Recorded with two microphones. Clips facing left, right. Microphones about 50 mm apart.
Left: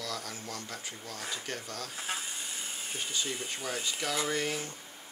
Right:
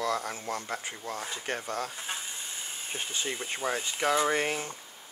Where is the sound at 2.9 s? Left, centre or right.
Right.